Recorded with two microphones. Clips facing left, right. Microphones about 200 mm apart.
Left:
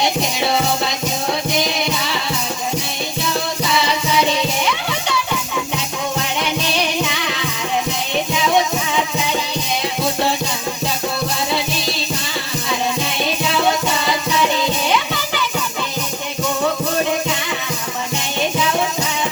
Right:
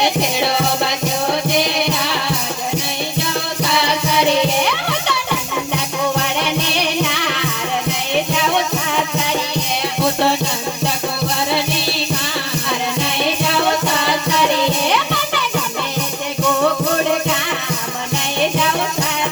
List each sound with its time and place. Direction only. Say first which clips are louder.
3.8 s music: right 4 dB; 60° right (ahead or behind)
7.0 s music: right 2 dB; 60° right (ahead or behind)
13.5 s music: even; 65° right (ahead or behind)